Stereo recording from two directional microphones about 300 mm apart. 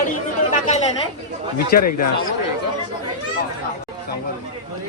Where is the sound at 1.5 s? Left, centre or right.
Left.